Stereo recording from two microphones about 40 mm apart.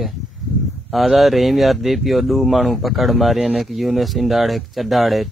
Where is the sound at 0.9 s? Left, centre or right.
Centre.